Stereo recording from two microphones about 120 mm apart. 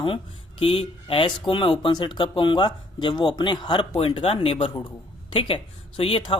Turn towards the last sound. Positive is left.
turn(degrees=45)  # may be behind; listen again after turning